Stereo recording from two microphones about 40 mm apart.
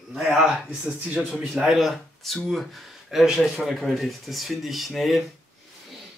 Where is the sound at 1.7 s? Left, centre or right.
Centre.